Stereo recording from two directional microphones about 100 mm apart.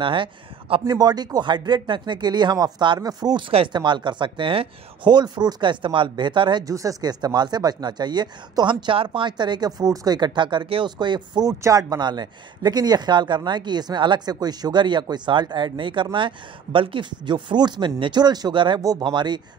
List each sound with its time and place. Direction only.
0.0 s a man's voice: 55° right (ahead or behind)
0.8 s speech: 45° right (ahead or behind)
6.6 s speech: 35° right (ahead or behind)
11.4 s speech: 35° right (ahead or behind); by 18.8 s 55° right (ahead or behind)
18.8 s speech: 40° right (ahead or behind)
19.0 s speech: 50° right (ahead or behind)